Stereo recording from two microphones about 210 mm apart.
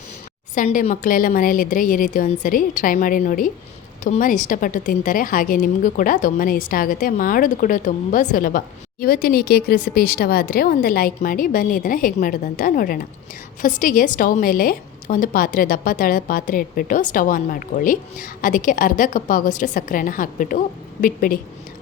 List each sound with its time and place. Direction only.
0.5 s a woman's voice: 40° left (ahead or behind)